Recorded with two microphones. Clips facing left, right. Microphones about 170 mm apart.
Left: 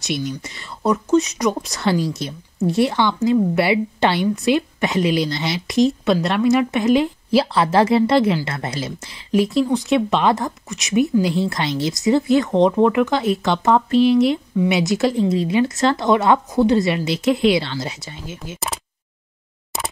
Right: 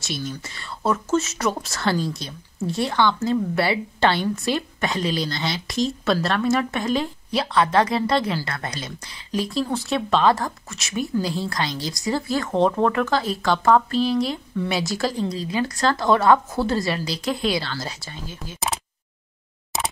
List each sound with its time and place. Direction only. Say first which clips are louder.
0.2 s speech: left 5 dB; 20° left (ahead or behind)
2.0 s speech: left 4 dB; centre (ahead or behind)
2.8 s speech: left 3 dB; 20° left (ahead or behind)